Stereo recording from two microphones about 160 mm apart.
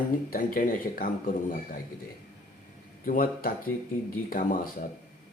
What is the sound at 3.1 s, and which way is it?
Speech, 65° left (ahead or behind).